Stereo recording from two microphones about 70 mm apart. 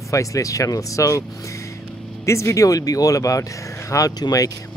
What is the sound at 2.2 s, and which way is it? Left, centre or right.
Speech, left.